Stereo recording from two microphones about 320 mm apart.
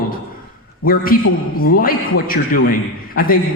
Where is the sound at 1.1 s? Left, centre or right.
Left.